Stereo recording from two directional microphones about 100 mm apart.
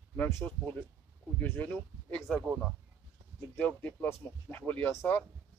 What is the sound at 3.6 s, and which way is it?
Speech, 15° left (ahead or behind).